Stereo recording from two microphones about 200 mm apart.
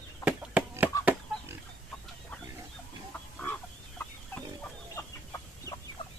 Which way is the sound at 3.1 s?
5° left (ahead or behind).